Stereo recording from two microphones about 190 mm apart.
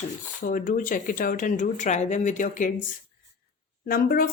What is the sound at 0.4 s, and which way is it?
A woman's voice, 45° left (ahead or behind).